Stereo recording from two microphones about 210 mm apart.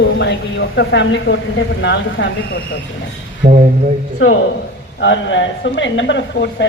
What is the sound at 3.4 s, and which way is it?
Speech, 35° right (ahead or behind).